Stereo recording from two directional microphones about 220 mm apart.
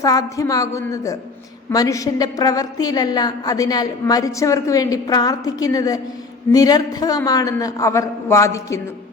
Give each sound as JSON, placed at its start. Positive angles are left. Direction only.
{"t": 0.0, "sound": "a woman's voice", "side_deg": 15}